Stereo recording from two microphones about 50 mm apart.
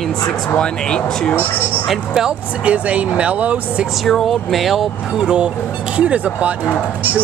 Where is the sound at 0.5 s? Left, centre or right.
Centre.